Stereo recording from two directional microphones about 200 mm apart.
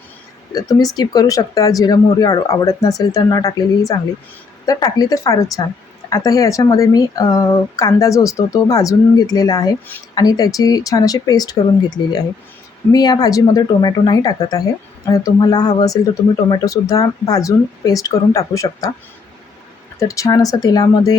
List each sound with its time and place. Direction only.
0.5 s speech: 15° left (ahead or behind)
20.0 s speech: 15° left (ahead or behind)